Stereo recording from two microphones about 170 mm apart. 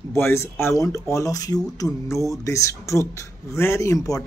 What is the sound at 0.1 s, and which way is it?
Speech, 15° left (ahead or behind).